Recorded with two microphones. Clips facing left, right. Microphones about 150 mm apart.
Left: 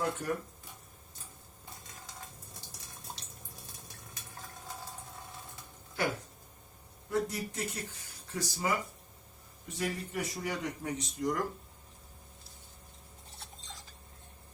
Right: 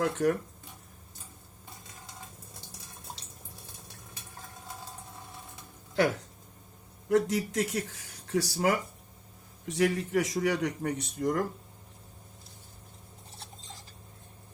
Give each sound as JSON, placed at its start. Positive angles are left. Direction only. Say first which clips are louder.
{"t": 0.0, "sound": "a man's voice", "louder": "right 7 dB", "side_deg": -90}
{"t": 7.1, "sound": "a man's voice", "louder": "right 7 dB", "side_deg": -90}
{"t": 9.6, "sound": "a man's voice", "louder": "right 9 dB", "side_deg": -85}